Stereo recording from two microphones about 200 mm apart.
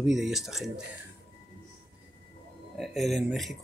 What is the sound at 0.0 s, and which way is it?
Speech, centre (ahead or behind).